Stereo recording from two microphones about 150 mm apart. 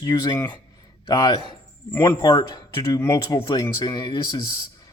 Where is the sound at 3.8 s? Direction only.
30° left (ahead or behind).